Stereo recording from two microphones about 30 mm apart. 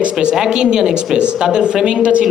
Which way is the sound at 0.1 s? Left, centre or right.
Right.